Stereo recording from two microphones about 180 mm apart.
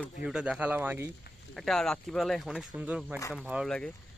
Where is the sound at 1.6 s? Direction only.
Centre (ahead or behind).